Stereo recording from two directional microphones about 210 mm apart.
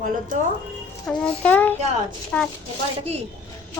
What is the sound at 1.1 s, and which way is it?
A child's voice, 5° left (ahead or behind).